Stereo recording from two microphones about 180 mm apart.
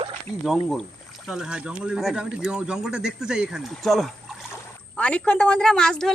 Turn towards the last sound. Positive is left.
turn(degrees=5)  # may be behind; listen again after turning